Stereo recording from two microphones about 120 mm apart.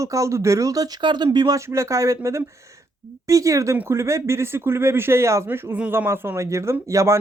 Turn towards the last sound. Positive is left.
turn(degrees=-25)  # may be behind; listen again after turning